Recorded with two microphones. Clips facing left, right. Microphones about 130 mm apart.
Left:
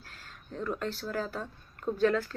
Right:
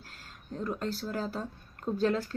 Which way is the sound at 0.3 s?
35° right (ahead or behind).